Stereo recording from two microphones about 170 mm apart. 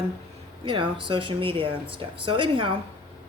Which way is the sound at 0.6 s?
30° right (ahead or behind).